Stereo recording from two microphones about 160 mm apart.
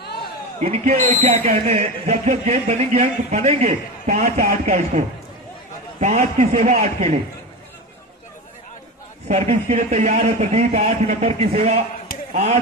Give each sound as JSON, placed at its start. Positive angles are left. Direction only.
{"t": 0.0, "sound": "a sound", "side_deg": 85}
{"t": 0.6, "sound": "a man's voice", "side_deg": -45}
{"t": 9.3, "sound": "a man's voice", "side_deg": -45}